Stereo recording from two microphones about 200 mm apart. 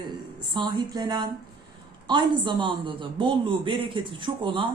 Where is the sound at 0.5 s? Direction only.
20° right (ahead or behind).